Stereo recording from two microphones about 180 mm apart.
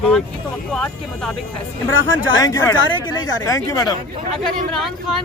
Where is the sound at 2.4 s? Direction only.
20° left (ahead or behind).